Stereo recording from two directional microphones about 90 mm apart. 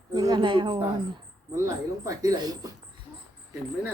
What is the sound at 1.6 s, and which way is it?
Speech, 40° right (ahead or behind).